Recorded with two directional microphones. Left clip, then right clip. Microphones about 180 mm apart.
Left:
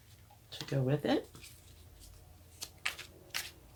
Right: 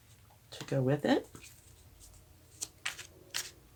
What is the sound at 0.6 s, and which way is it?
Speech, 50° right (ahead or behind).